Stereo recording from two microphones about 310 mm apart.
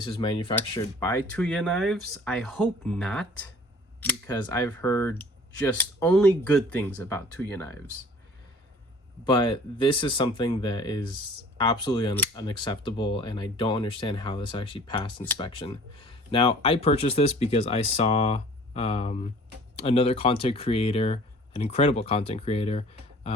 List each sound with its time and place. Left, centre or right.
0.0 s speech: centre
9.2 s speech: centre